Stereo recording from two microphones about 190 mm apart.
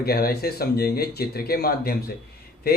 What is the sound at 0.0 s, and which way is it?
Speech, 55° left (ahead or behind).